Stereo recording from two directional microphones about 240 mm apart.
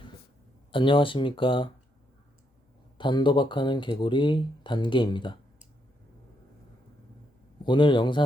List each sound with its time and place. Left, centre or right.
0.7 s speech: left
3.0 s speech: centre
7.6 s speech: centre